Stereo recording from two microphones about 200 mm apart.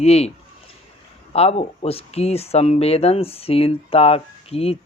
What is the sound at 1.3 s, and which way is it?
Speech, 30° left (ahead or behind).